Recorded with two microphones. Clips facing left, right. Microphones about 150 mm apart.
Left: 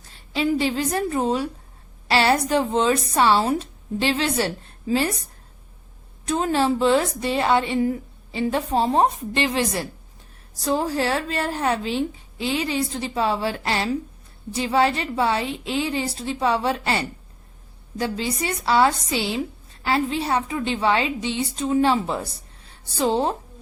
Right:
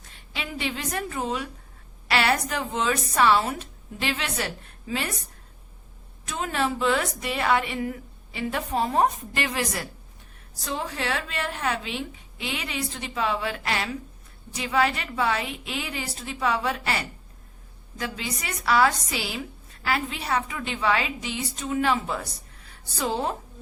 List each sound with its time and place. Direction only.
0.0 s a woman's voice: 35° left (ahead or behind)